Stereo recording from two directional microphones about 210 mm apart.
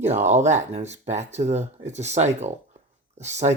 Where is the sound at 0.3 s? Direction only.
35° right (ahead or behind).